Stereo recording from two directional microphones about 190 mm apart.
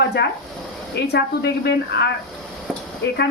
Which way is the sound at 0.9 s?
60° left (ahead or behind).